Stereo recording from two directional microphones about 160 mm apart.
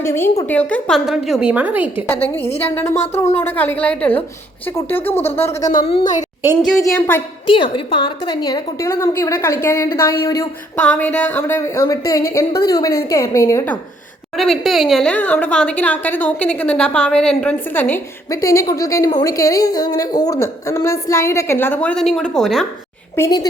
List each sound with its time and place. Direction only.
0.0 s a woman's voice: 15° left (ahead or behind); by 2.0 s 10° right (ahead or behind)
2.2 s a woman's voice: 10° left (ahead or behind)
5.8 s a woman's voice: 35° left (ahead or behind)
7.5 s a woman's voice: 30° left (ahead or behind)
10.8 s a woman's voice: 10° left (ahead or behind)
14.3 s a woman's voice: centre (ahead or behind)
23.1 s a woman's voice: 20° left (ahead or behind)